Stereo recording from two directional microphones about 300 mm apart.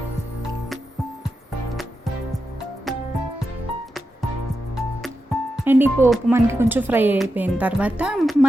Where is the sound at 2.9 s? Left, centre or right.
Centre.